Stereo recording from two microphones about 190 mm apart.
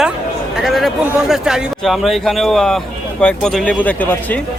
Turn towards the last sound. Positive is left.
turn(degrees=10)  # may be behind; listen again after turning